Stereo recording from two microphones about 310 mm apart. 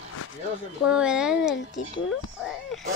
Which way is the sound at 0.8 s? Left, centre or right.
Centre.